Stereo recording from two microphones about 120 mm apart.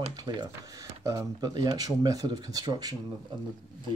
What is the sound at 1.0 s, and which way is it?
Speech, 25° right (ahead or behind).